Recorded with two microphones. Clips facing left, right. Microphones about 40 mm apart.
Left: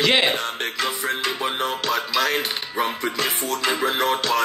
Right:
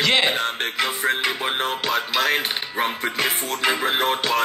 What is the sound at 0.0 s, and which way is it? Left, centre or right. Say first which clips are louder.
Music: left 1 dB; centre.